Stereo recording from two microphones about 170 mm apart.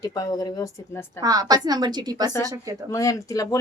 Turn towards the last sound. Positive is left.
turn(degrees=20)  # may be behind; listen again after turning